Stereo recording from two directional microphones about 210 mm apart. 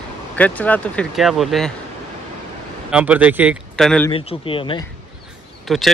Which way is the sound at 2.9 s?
5° right (ahead or behind).